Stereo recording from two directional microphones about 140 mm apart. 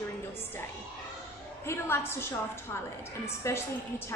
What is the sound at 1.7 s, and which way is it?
A woman's voice, 20° left (ahead or behind).